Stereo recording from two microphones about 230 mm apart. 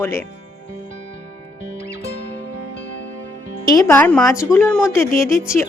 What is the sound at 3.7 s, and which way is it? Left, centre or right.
A woman's voice, centre.